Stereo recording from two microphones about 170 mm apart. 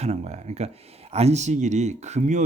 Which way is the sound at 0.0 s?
40° right (ahead or behind).